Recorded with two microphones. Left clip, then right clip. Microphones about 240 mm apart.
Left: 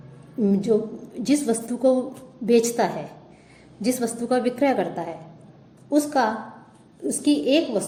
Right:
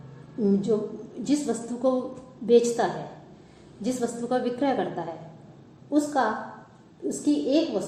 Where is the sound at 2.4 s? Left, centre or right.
Left.